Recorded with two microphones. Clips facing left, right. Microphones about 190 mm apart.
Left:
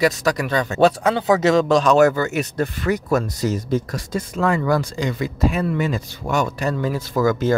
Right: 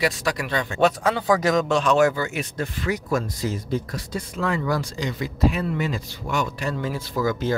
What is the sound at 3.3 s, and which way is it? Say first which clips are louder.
Speech: left 5 dB; 40° left (ahead or behind).